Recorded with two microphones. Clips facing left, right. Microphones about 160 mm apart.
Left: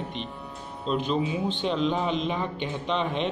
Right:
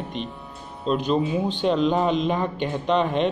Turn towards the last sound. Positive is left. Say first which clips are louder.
# right 6 dB
turn(degrees=-45)  # may be behind; listen again after turning